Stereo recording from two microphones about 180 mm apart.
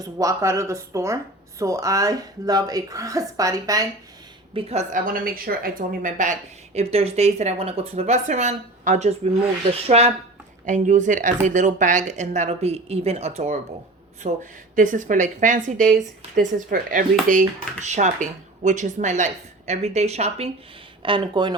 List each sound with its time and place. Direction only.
0.0 s speech: 20° right (ahead or behind)
4.5 s speech: 35° right (ahead or behind)